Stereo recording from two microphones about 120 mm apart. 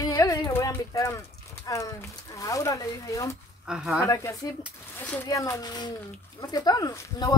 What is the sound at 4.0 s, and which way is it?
Speech, 25° left (ahead or behind).